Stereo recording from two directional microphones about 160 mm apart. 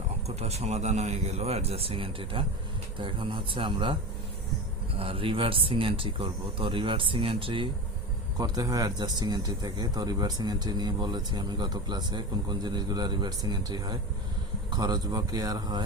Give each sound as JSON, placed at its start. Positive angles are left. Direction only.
{"t": 0.3, "sound": "speech", "side_deg": -40}
{"t": 4.9, "sound": "a man's voice", "side_deg": -35}